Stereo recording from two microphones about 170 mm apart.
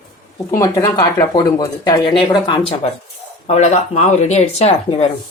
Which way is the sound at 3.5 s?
40° left (ahead or behind).